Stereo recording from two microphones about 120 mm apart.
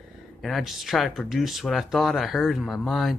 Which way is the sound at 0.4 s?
Centre (ahead or behind).